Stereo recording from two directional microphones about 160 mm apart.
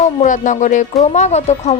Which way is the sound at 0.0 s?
50° left (ahead or behind).